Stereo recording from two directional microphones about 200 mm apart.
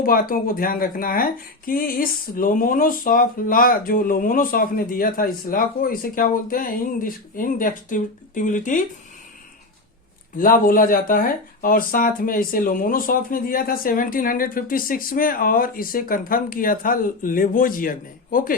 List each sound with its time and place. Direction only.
0.0 s speech: 45° left (ahead or behind)
10.3 s speech: 45° left (ahead or behind)